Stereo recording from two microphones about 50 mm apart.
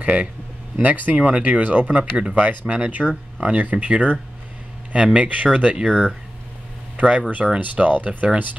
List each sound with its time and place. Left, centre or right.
0.0 s speech: right
5.9 s speech: centre
7.0 s speech: right